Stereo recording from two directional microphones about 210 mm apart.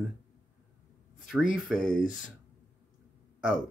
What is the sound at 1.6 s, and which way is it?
Speech, centre (ahead or behind).